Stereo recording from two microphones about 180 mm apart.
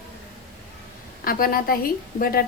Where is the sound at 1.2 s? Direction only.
55° left (ahead or behind).